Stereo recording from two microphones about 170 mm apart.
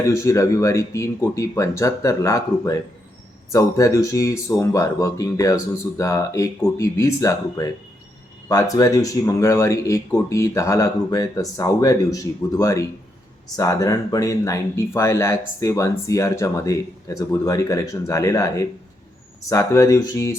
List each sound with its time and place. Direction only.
0.1 s speech: 15° left (ahead or behind)